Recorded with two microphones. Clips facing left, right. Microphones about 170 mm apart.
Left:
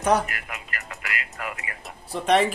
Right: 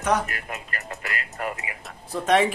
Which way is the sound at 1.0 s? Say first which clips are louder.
Right 2 dB; 40° right (ahead or behind).